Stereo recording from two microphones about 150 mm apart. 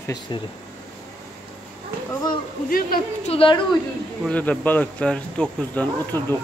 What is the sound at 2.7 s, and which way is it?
Speech, 75° left (ahead or behind).